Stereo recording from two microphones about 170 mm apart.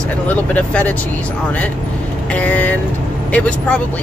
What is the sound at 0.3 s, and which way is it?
Speech, 10° left (ahead or behind).